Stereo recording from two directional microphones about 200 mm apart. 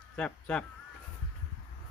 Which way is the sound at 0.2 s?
5° left (ahead or behind).